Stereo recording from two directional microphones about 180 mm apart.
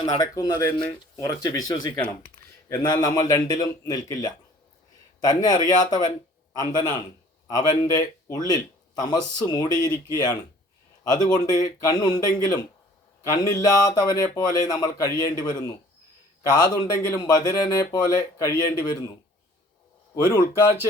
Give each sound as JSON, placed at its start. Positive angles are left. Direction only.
{"t": 0.0, "sound": "speech", "side_deg": 20}
{"t": 11.0, "sound": "speech", "side_deg": 20}
{"t": 20.2, "sound": "speech", "side_deg": 15}